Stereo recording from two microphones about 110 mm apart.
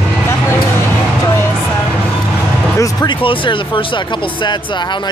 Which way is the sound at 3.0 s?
50° left (ahead or behind).